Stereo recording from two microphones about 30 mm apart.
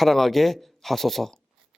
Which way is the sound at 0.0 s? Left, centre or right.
Centre.